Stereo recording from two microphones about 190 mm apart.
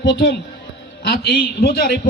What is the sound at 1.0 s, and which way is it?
Speech, 60° left (ahead or behind).